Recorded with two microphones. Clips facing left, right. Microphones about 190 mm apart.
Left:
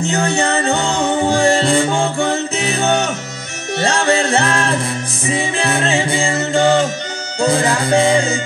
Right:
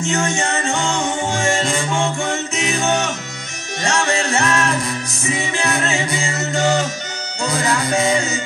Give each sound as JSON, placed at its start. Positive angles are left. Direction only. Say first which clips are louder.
{"t": 0.0, "sound": "music", "louder": "left 3 dB", "side_deg": 35}